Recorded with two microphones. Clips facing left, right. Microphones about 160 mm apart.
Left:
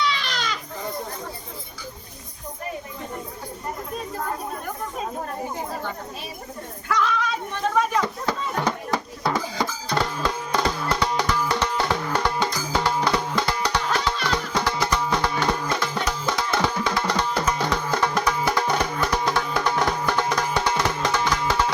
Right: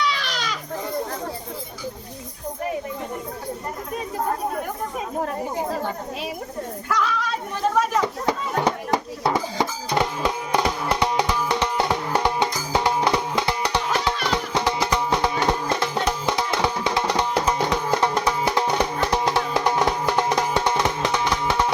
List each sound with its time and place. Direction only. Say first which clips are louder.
0.1 s goat: even; 5° right (ahead or behind)
6.8 s a sound: left 2 dB; 5° right (ahead or behind)
8.0 s music: right 2 dB; 15° right (ahead or behind)